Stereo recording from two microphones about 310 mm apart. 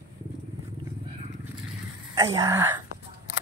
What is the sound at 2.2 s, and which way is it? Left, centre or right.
Speech, centre.